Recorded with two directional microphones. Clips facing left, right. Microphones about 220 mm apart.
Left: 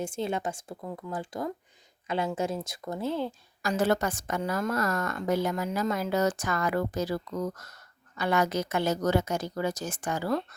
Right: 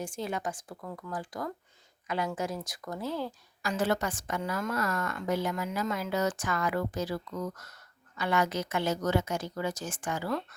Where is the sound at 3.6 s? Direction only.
40° left (ahead or behind).